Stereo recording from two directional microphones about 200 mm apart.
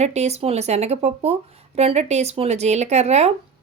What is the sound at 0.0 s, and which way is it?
Speech, 35° right (ahead or behind).